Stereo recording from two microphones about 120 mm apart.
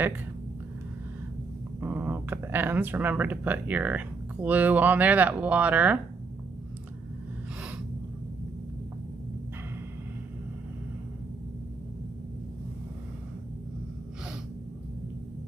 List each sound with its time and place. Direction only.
1.8 s speech: 15° right (ahead or behind)